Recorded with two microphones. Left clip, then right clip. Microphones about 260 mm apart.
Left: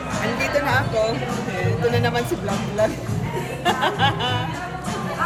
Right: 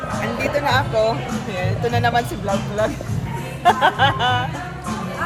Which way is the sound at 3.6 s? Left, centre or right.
Right.